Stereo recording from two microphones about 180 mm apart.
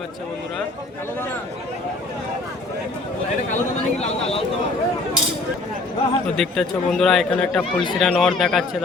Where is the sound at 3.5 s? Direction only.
35° left (ahead or behind).